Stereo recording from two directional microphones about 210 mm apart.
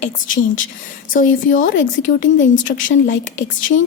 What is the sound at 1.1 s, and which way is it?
A woman's voice, 40° left (ahead or behind).